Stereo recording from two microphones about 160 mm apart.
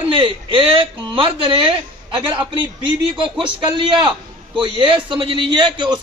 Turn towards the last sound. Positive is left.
turn(degrees=-30)  # may be behind; listen again after turning